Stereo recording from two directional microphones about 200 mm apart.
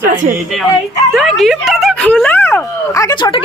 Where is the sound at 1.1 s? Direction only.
Centre (ahead or behind).